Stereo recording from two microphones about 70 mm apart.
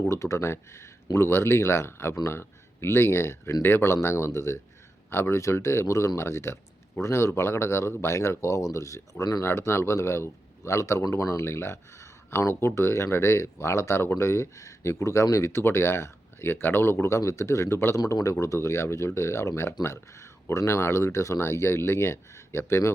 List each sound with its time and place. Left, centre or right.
0.1 s speech: left
9.4 s speech: left
17.9 s speech: left